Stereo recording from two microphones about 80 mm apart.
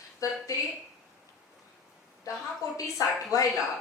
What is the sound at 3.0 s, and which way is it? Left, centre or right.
Speech, left.